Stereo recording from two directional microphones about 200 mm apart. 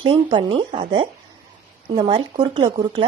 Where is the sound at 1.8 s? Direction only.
25° right (ahead or behind).